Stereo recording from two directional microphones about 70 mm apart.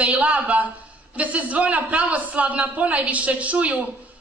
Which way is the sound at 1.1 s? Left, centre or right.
Right.